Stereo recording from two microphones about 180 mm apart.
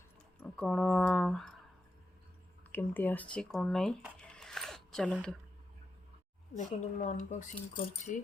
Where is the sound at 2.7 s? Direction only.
10° left (ahead or behind).